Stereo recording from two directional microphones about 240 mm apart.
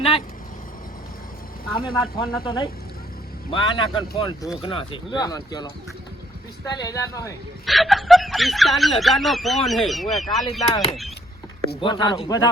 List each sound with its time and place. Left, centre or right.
1.7 s speech: left
6.7 s speech: centre
7.6 s speech: centre
11.8 s speech: centre